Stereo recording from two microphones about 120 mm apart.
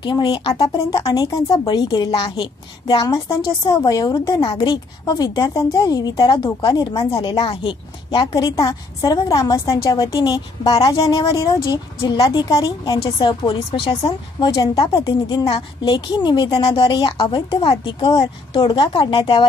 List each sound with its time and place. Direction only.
0.0 s a woman's voice: 40° left (ahead or behind)
8.3 s a woman's voice: 30° left (ahead or behind)
13.0 s a woman's voice: 40° left (ahead or behind)